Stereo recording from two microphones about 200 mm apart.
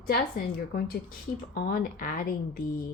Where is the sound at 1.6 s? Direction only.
50° left (ahead or behind).